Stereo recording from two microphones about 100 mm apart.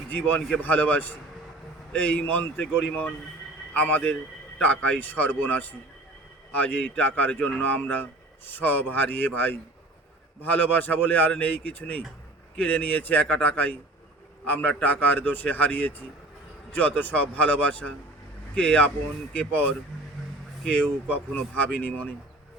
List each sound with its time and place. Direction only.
0.1 s a man's voice: 20° left (ahead or behind)